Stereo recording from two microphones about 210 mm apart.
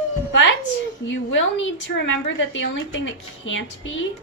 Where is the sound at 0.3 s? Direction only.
60° left (ahead or behind).